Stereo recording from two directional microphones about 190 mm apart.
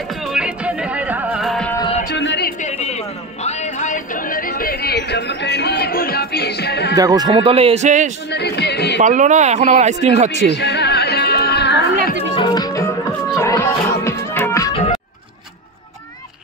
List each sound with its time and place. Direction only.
0.2 s music: 5° right (ahead or behind)
2.0 s a sound: 65° left (ahead or behind)
3.4 s music: 35° left (ahead or behind); by 7.0 s 60° left (ahead or behind)
7.0 s speech: 20° right (ahead or behind); by 8.1 s 40° right (ahead or behind)
8.3 s speech: 60° left (ahead or behind)
9.0 s speech: 40° right (ahead or behind)
10.5 s music: 65° left (ahead or behind)
12.4 s music: 20° left (ahead or behind)
14.7 s music: 30° left (ahead or behind)